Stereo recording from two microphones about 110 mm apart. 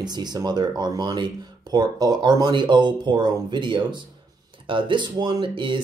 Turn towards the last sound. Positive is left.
turn(degrees=-45)  # may be behind; listen again after turning